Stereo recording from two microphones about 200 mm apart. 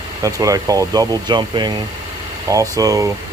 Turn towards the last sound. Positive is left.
turn(degrees=-15)  # may be behind; listen again after turning